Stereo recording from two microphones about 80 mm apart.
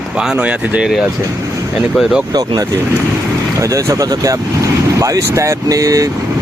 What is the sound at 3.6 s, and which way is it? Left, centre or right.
Speech, right.